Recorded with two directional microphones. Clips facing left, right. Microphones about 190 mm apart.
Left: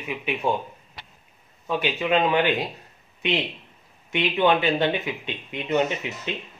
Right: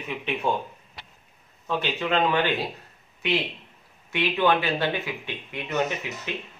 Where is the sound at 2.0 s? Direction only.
15° left (ahead or behind).